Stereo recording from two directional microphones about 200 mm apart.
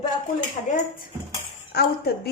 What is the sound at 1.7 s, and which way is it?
Speech, 55° left (ahead or behind).